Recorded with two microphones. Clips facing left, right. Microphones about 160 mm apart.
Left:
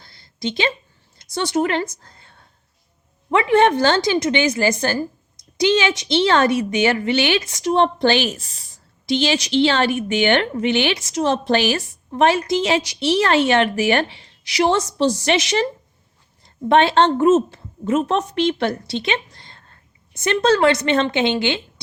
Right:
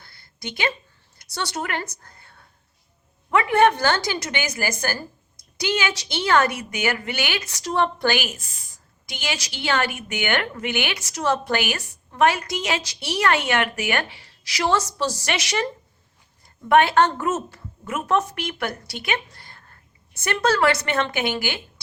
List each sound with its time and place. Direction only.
0.0 s a sound: 20° left (ahead or behind)
1.2 s a woman's voice: 20° left (ahead or behind)
16.6 s a woman's voice: 25° left (ahead or behind)